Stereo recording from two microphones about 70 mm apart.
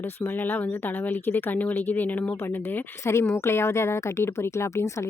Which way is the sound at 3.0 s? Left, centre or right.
Left.